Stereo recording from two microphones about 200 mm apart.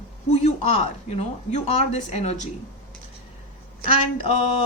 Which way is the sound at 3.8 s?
30° left (ahead or behind).